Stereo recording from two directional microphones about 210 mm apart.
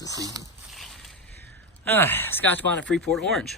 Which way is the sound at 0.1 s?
15° right (ahead or behind).